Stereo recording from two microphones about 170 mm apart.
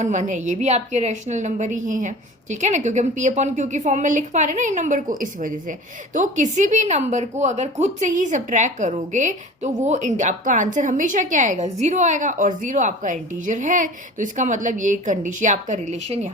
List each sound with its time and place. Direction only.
0.0 s a woman's voice: 45° right (ahead or behind)